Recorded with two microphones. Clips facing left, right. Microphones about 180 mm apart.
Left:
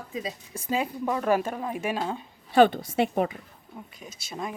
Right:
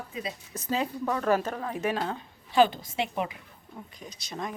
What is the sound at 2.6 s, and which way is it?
Speech, 55° left (ahead or behind).